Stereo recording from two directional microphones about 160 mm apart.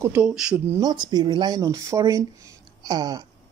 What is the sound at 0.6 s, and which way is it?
Speech, 20° right (ahead or behind).